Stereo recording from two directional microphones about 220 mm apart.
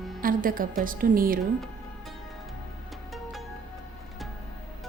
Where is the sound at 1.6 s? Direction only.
Centre (ahead or behind).